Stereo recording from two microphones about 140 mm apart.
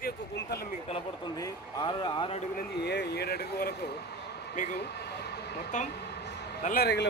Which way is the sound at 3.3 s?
90° left.